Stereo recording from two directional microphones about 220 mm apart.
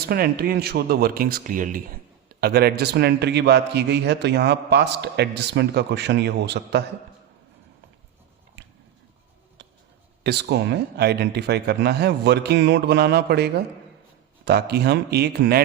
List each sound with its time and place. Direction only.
0.0 s speech: 45° right (ahead or behind)
9.6 s a sound: 50° right (ahead or behind)
10.2 s speech: 50° right (ahead or behind)